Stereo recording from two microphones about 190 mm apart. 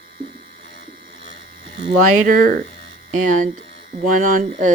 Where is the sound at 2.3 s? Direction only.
50° right (ahead or behind).